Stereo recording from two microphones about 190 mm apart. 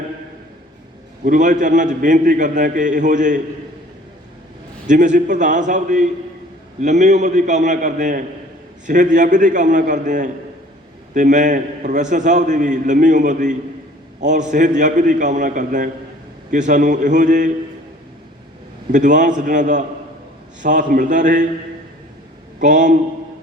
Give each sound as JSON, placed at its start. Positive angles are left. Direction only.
{"t": 1.2, "sound": "a man's voice", "side_deg": -40}
{"t": 4.9, "sound": "a man's voice", "side_deg": -40}
{"t": 18.9, "sound": "a man's voice", "side_deg": -40}
{"t": 22.6, "sound": "a man's voice", "side_deg": -40}